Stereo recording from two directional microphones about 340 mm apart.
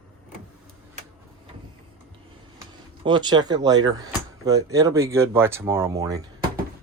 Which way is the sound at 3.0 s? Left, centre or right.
Centre.